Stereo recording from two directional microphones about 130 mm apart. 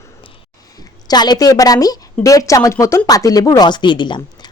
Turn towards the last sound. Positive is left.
turn(degrees=35)  # may be behind; listen again after turning